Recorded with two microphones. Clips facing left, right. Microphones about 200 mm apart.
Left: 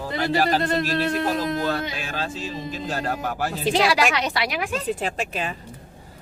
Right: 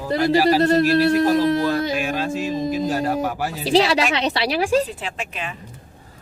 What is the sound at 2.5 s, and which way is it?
Speech, 40° right (ahead or behind).